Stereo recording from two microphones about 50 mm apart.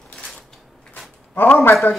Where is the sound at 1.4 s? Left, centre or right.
Left.